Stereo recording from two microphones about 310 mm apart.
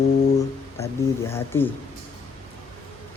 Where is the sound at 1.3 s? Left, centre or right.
Centre.